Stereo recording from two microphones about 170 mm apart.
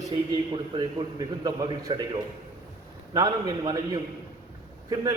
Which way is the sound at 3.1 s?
20° right (ahead or behind).